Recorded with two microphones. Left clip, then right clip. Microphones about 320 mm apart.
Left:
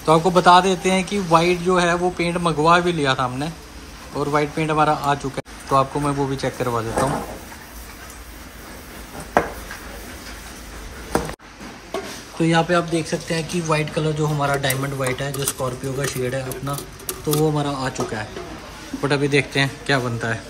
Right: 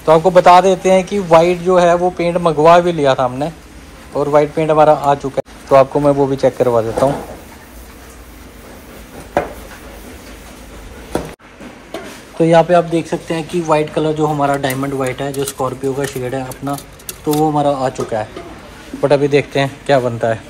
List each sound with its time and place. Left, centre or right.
0.0 s speech: centre
11.9 s speech: centre